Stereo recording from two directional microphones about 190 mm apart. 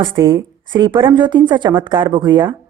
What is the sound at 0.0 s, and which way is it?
A woman's voice, 25° right (ahead or behind).